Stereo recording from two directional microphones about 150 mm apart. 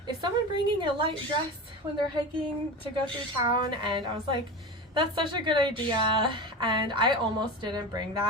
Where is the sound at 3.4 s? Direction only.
30° right (ahead or behind).